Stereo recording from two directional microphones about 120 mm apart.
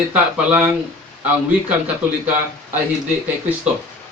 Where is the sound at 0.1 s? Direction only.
10° right (ahead or behind).